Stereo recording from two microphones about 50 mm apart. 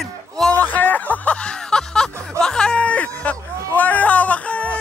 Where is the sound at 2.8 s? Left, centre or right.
Left.